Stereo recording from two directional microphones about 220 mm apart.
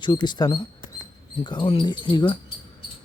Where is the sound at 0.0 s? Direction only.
20° left (ahead or behind).